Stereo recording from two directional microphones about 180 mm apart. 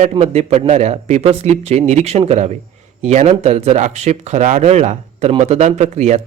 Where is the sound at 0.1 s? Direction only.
40° right (ahead or behind).